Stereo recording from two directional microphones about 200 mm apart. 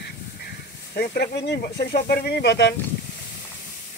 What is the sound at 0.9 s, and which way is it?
Speech, 50° left (ahead or behind).